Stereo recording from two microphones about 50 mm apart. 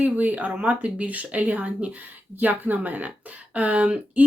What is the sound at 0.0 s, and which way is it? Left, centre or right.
Speech, right.